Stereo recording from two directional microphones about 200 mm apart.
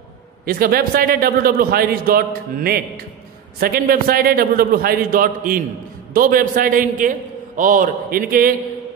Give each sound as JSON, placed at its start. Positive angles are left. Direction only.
{"t": 0.5, "sound": "a man's voice", "side_deg": -45}